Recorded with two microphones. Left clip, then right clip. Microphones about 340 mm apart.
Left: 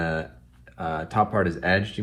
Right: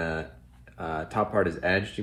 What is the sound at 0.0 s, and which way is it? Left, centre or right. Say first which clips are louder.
Speech: left 3 dB; centre.